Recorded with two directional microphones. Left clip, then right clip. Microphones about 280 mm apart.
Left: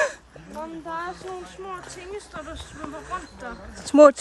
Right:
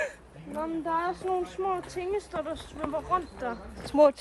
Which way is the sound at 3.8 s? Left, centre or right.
Left.